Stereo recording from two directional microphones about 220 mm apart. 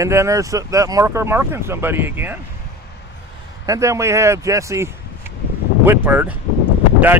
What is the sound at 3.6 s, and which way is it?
Speech, 15° right (ahead or behind).